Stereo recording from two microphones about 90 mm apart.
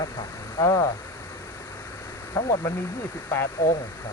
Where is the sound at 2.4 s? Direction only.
25° left (ahead or behind).